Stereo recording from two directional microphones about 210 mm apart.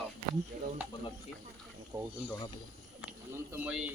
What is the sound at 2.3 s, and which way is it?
Speech, 15° left (ahead or behind).